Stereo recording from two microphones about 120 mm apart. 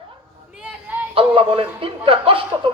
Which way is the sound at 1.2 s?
45° right (ahead or behind).